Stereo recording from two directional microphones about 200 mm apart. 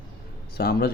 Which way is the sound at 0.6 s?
50° left (ahead or behind).